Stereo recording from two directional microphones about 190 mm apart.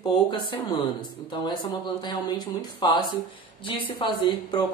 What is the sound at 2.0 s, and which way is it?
Speech, 20° left (ahead or behind).